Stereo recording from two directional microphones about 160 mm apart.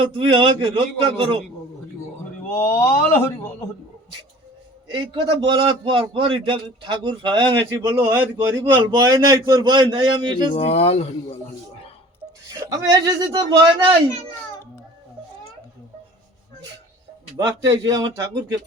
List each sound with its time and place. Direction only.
0.1 s a man's voice: 30° right (ahead or behind)
2.6 s speech: 15° left (ahead or behind)
4.9 s a man's voice: 30° right (ahead or behind)
7.7 s a man's voice: 15° right (ahead or behind)
8.7 s speech: 25° right (ahead or behind)
10.5 s speech: 40° left (ahead or behind)
12.5 s speech: 20° right (ahead or behind)
17.3 s speech: 20° right (ahead or behind)